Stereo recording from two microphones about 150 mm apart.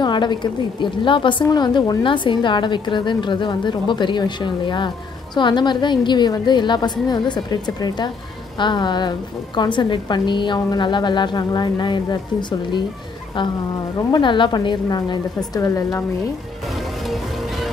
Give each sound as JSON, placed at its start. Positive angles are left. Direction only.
{"t": 0.0, "sound": "a woman's voice", "side_deg": 30}
{"t": 14.1, "sound": "a woman's voice", "side_deg": 30}